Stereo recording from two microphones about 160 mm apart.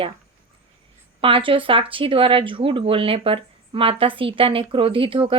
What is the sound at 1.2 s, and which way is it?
Speech, 35° right (ahead or behind).